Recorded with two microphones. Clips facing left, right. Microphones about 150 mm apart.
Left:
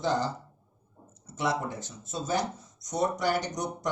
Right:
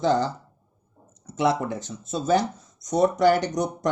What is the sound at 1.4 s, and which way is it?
Speech, 75° right (ahead or behind).